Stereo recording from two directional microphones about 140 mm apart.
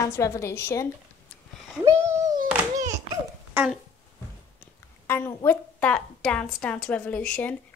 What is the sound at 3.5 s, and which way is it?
Speech, 15° right (ahead or behind).